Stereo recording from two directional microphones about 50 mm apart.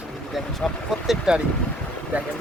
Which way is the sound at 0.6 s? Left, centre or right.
Centre.